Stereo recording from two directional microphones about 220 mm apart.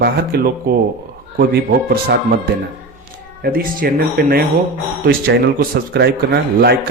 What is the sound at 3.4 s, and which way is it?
Speech, 40° right (ahead or behind).